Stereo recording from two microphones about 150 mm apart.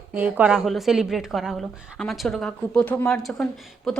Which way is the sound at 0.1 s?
10° right (ahead or behind).